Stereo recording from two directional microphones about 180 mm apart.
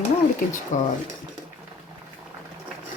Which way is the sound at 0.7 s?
45° left (ahead or behind).